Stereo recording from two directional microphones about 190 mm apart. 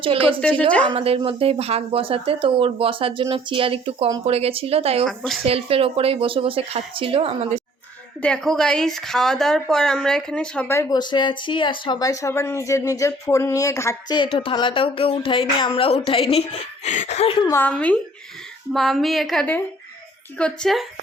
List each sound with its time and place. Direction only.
0.0 s speech: 30° right (ahead or behind)
0.3 s speech: 5° left (ahead or behind)
0.9 s speech: 30° right (ahead or behind)
5.0 s a woman's voice: centre (ahead or behind)
5.5 s speech: 30° right (ahead or behind)
8.2 s speech: 5° left (ahead or behind); by 17.3 s 35° left (ahead or behind)
17.4 s a woman's voice: 10° left (ahead or behind)